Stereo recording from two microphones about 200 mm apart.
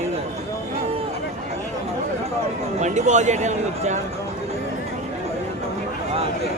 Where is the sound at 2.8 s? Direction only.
35° right (ahead or behind).